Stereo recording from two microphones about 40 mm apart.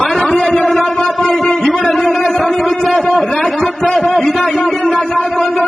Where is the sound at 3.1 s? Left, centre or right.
Centre.